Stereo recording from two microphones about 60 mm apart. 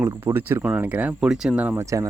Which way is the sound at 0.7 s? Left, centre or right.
Right.